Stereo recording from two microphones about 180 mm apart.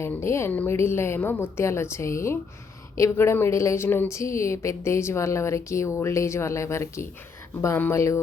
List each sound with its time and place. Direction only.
0.0 s a woman's voice: 15° left (ahead or behind)